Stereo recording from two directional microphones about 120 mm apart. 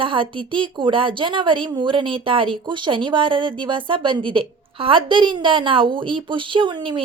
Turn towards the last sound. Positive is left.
turn(degrees=-40)  # may be behind; listen again after turning